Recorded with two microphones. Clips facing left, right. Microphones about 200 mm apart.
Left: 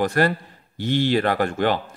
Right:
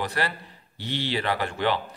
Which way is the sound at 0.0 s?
50° left (ahead or behind).